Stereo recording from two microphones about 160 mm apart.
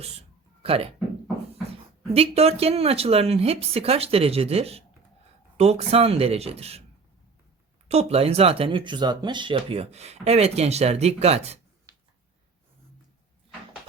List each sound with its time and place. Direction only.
0.0 s music: 40° right (ahead or behind)
2.1 s speech: 40° right (ahead or behind)
7.9 s speech: 40° right (ahead or behind)